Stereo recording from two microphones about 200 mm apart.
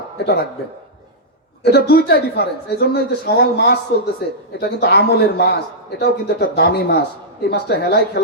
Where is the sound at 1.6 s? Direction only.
55° left (ahead or behind).